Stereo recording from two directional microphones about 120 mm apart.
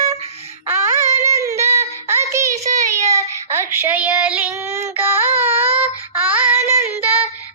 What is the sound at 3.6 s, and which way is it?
Child singing, 20° right (ahead or behind).